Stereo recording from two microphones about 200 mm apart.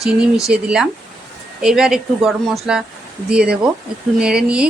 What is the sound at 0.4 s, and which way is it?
Speech, 5° right (ahead or behind).